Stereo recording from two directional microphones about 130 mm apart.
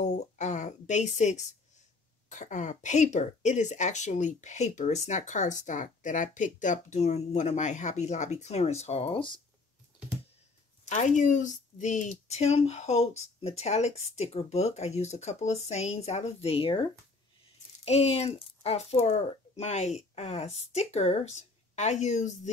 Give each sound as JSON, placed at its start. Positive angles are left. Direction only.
{"t": 0.0, "sound": "a sound", "side_deg": 65}
{"t": 2.2, "sound": "speech", "side_deg": 70}
{"t": 10.9, "sound": "speech", "side_deg": 70}
{"t": 17.8, "sound": "speech", "side_deg": 55}